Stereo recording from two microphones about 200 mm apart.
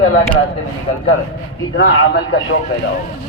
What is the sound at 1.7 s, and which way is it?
Speech, 70° left (ahead or behind).